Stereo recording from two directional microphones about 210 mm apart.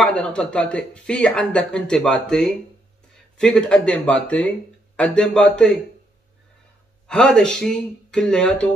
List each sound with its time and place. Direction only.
0.0 s speech: 5° left (ahead or behind)
7.1 s speech: 5° left (ahead or behind)